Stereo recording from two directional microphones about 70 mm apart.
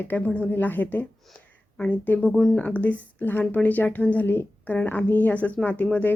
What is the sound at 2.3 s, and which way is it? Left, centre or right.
Speech, centre.